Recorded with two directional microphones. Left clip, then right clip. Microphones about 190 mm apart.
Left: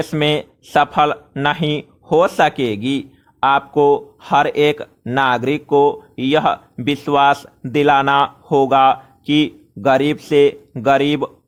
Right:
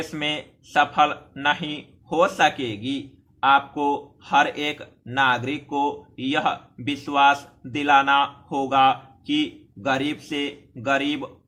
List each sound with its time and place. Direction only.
0.0 s speech: 50° left (ahead or behind)